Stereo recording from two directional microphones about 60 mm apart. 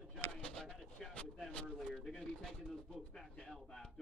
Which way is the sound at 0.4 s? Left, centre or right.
Centre.